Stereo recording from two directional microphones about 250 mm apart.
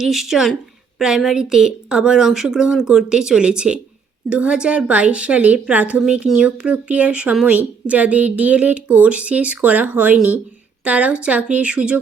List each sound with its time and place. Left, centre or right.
0.0 s a woman's voice: centre